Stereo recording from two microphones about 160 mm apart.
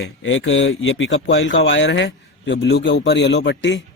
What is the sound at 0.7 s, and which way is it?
Speech, 90° left.